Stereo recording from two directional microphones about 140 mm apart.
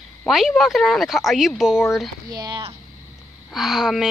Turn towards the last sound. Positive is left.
turn(degrees=-5)  # may be behind; listen again after turning